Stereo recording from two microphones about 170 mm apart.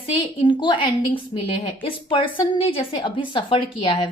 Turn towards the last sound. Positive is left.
turn(degrees=30)  # may be behind; listen again after turning